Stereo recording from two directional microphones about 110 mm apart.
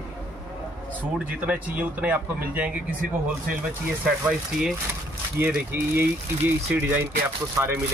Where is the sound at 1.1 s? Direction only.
10° right (ahead or behind).